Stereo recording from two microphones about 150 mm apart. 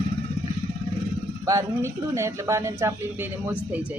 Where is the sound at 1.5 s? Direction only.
20° right (ahead or behind).